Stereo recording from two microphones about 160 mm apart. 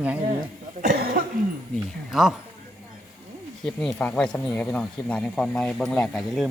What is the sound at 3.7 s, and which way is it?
Speech, 10° left (ahead or behind).